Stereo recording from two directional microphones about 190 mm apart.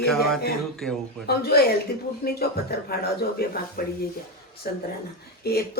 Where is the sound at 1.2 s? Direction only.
55° left (ahead or behind).